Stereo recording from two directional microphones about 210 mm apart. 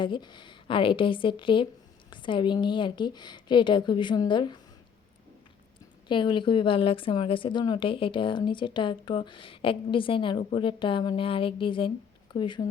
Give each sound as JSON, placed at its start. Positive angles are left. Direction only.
{"t": 0.0, "sound": "speech", "side_deg": 20}
{"t": 6.1, "sound": "speech", "side_deg": 25}